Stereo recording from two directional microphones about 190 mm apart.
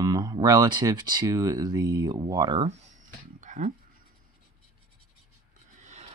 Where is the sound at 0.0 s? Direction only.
20° right (ahead or behind).